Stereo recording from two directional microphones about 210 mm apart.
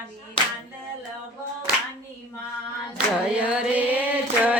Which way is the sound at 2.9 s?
5° right (ahead or behind).